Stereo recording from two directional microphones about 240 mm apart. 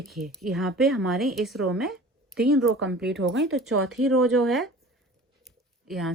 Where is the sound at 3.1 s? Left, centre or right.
Right.